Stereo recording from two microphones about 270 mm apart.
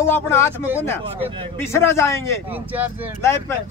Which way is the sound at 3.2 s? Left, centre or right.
Centre.